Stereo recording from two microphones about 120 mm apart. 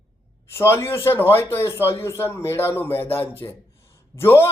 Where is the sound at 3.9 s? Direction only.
20° left (ahead or behind).